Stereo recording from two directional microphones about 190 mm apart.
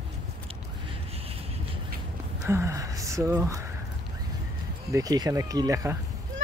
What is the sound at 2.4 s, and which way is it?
Speech, 15° right (ahead or behind).